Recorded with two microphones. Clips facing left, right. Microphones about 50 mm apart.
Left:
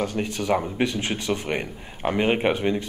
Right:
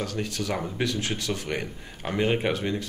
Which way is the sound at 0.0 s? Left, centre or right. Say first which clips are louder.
Left 4 dB; left.